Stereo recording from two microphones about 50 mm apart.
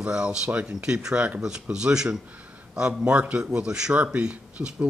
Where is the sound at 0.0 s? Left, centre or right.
Centre.